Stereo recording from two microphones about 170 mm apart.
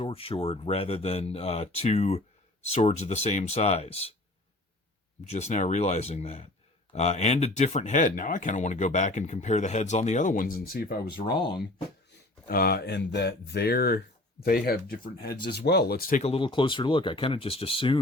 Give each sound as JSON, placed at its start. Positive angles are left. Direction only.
{"t": 0.0, "sound": "speech", "side_deg": 35}
{"t": 5.3, "sound": "speech", "side_deg": 40}
{"t": 11.3, "sound": "speech", "side_deg": 30}
{"t": 12.1, "sound": "speech", "side_deg": 60}
{"t": 16.2, "sound": "speech", "side_deg": 30}